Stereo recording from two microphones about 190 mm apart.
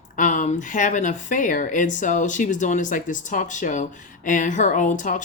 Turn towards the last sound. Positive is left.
turn(degrees=45)  # may be behind; listen again after turning